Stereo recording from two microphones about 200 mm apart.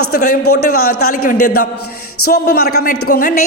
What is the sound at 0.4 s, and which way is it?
Speech, 90° left.